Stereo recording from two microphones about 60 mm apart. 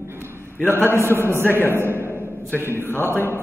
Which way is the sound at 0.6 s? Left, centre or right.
Left.